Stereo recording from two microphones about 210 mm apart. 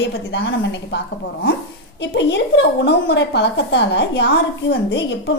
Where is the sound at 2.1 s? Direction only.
55° left (ahead or behind).